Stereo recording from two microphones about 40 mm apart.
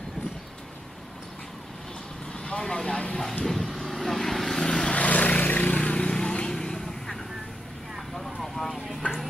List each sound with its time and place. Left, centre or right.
2.4 s speech: left
3.4 s vehicle: centre
4.6 s vehicle: centre
4.9 s vehicle: left
5.9 s vehicle: left
8.2 s vehicle: centre